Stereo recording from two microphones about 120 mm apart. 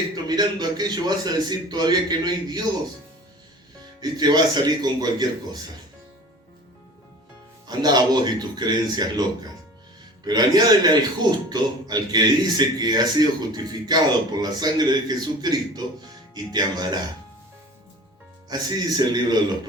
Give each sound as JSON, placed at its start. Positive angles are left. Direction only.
{"t": 0.3, "sound": "speech", "side_deg": -35}
{"t": 4.0, "sound": "speech", "side_deg": -35}
{"t": 7.7, "sound": "speech", "side_deg": -35}
{"t": 10.2, "sound": "speech", "side_deg": -35}
{"t": 18.4, "sound": "speech", "side_deg": -35}